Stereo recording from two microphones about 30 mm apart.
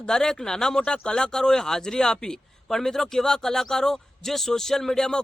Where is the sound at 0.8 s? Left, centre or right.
Left; by 5.1 s centre.